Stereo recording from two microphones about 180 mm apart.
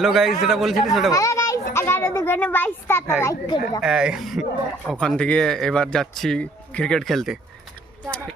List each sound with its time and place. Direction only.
0.0 s speech: centre (ahead or behind)
1.1 s a child's voice: 15° left (ahead or behind)
3.8 s speech: 5° right (ahead or behind)